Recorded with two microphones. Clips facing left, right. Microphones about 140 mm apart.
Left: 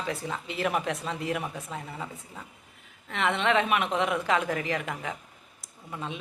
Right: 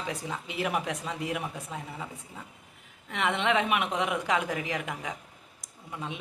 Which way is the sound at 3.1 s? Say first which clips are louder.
Left 2 dB; 15° right (ahead or behind).